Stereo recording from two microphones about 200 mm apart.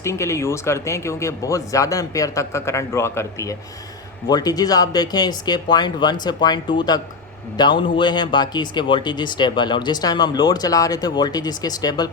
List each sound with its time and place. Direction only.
0.0 s speech: 15° left (ahead or behind)